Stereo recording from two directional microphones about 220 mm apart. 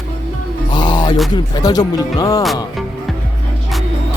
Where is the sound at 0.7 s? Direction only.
20° left (ahead or behind).